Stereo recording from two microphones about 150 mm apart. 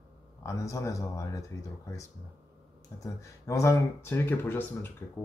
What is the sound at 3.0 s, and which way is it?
Speech, 20° left (ahead or behind).